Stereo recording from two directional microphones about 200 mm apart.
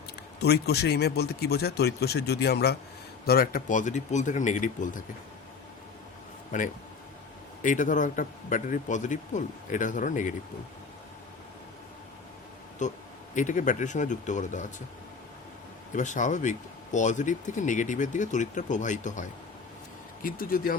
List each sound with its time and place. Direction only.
0.3 s speech: 55° left (ahead or behind)
6.5 s speech: 40° left (ahead or behind)
12.8 s speech: 40° left (ahead or behind)
16.0 s speech: 40° left (ahead or behind)